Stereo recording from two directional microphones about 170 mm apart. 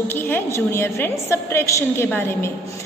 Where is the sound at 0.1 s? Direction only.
15° left (ahead or behind).